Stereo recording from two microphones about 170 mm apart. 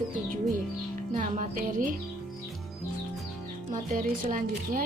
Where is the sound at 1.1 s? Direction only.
50° right (ahead or behind).